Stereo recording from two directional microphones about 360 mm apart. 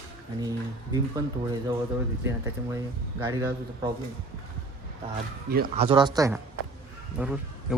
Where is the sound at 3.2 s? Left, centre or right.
Centre.